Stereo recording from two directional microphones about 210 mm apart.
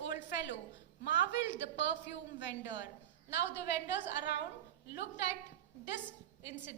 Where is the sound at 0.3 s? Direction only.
55° left (ahead or behind).